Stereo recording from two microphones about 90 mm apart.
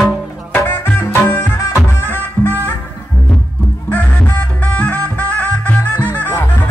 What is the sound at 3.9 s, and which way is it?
Music, 20° left (ahead or behind).